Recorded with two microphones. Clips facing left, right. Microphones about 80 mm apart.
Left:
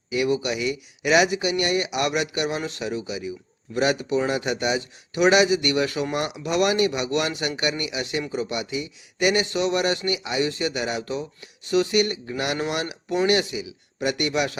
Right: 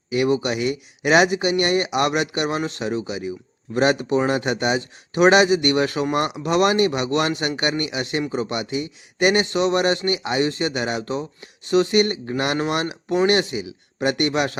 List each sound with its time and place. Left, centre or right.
0.1 s speech: right
8.2 s speech: right
8.4 s speech: right